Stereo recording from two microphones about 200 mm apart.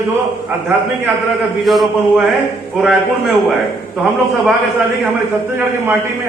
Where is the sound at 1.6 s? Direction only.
Centre (ahead or behind).